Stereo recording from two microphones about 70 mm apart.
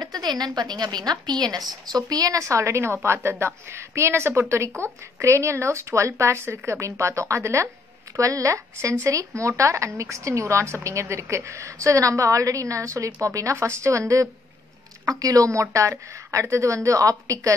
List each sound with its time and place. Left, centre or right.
0.0 s a woman's voice: right
15.0 s a woman's voice: right